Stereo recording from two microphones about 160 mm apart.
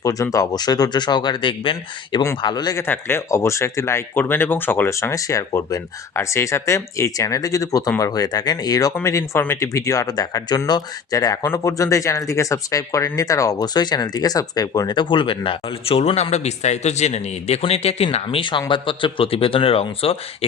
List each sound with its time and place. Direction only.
0.0 s speech: 20° left (ahead or behind)
2.8 s speech: 15° left (ahead or behind); by 20.1 s 35° left (ahead or behind)